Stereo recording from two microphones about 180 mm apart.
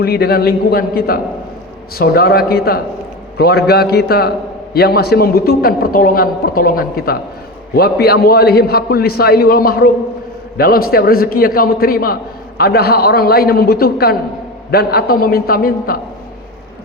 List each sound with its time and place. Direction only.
0.0 s a man's voice: 60° left (ahead or behind)